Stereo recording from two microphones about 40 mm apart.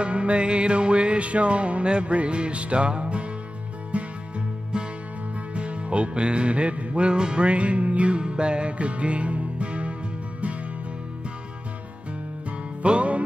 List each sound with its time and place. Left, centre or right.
0.0 s music: right
12.8 s music: right